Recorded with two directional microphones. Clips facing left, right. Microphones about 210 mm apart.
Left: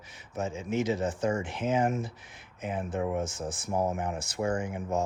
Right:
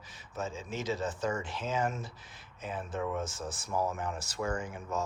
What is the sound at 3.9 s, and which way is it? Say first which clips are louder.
Speech: left 4 dB; 20° left (ahead or behind).